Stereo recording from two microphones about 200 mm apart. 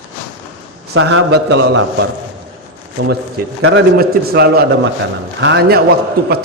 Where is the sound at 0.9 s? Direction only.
80° right.